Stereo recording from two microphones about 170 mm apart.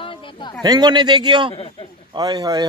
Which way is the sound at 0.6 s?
25° right (ahead or behind).